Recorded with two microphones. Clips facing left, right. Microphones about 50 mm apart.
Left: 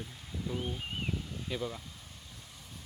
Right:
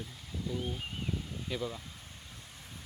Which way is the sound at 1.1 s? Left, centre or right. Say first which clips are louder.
Even; centre.